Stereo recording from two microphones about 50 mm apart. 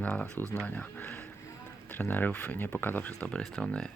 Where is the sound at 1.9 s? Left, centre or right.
Left.